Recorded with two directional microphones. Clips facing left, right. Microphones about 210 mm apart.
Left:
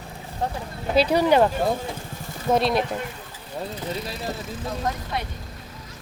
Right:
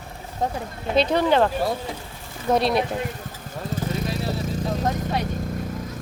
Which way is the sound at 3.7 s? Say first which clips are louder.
Right 4 dB; 45° right (ahead or behind).